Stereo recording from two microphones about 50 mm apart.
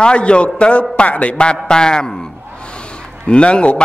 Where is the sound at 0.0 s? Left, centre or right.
Left.